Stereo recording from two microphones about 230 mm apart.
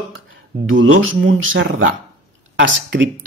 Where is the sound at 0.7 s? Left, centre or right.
Right.